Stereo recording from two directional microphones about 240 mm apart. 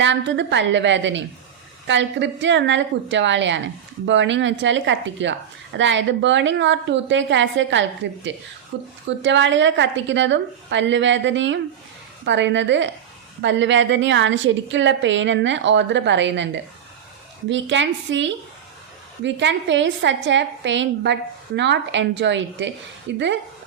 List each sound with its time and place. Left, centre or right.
0.0 s a woman's voice: right
17.5 s a woman's voice: right